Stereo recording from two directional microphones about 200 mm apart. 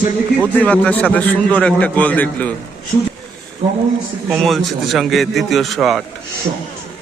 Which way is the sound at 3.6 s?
35° right (ahead or behind).